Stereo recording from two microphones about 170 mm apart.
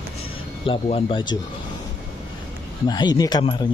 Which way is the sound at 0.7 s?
30° left (ahead or behind).